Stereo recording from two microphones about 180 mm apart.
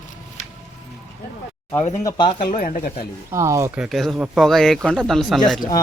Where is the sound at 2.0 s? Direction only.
25° left (ahead or behind).